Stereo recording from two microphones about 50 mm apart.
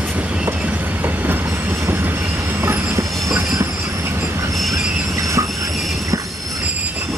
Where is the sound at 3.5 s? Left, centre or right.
Right.